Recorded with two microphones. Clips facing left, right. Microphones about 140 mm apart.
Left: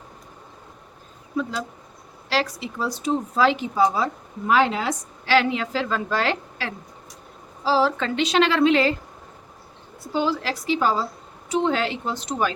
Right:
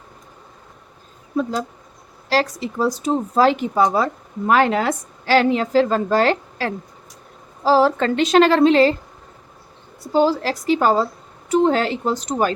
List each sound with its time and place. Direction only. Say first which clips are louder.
1.4 s a woman's voice: right 5 dB; 40° right (ahead or behind)
3.8 s a woman's voice: right 3 dB; 60° right (ahead or behind); by 9.0 s 35° right (ahead or behind)
10.1 s a woman's voice: right 7 dB; 40° right (ahead or behind)
11.6 s a woman's voice: right 5 dB; 40° right (ahead or behind)